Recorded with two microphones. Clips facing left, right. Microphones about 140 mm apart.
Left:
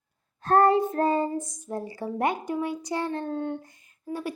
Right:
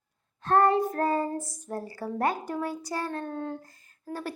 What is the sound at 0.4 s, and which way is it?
Child singing, 35° left (ahead or behind).